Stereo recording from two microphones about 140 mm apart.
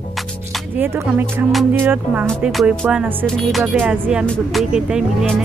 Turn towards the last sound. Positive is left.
turn(degrees=-5)  # may be behind; listen again after turning